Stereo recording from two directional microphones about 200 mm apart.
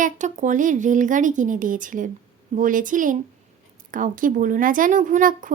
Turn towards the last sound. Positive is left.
turn(degrees=-40)  # may be behind; listen again after turning